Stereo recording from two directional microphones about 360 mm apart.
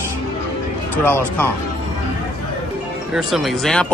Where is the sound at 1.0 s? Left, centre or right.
Centre.